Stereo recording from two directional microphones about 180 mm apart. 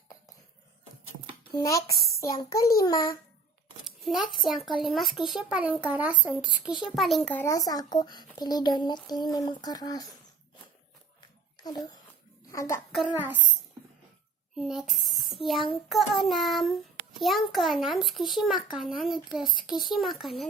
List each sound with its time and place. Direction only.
1.5 s a child's voice: 20° left (ahead or behind)
3.8 s a child's voice: centre (ahead or behind); by 10.1 s 20° left (ahead or behind)
11.5 s a child's voice: 20° left (ahead or behind)
12.9 s child singing: 5° right (ahead or behind)
14.5 s a child's voice: centre (ahead or behind)